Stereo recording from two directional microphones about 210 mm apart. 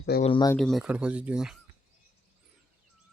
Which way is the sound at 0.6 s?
Centre (ahead or behind).